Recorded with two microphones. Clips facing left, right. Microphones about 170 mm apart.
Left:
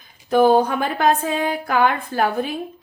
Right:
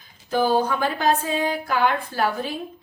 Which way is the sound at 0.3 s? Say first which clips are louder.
Left 6 dB; 60° left (ahead or behind).